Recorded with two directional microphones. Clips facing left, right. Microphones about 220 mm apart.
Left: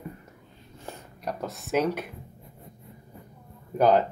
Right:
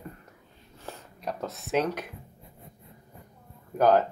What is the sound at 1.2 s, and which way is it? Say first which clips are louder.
Speech: left 1 dB; centre (ahead or behind).